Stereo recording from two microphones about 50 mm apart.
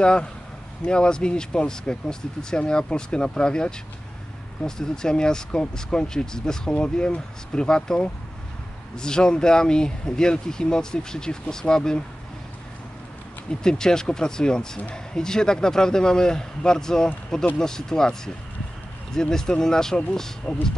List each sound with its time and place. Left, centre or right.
0.0 s speech: centre
13.5 s speech: centre